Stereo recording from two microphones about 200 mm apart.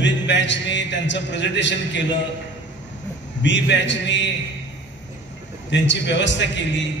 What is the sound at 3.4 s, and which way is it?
Speech, 65° left (ahead or behind).